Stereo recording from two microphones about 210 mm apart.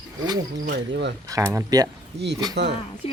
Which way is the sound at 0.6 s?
55° right (ahead or behind).